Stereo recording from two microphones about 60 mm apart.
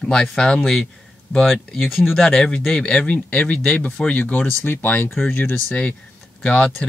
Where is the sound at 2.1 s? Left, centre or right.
Centre.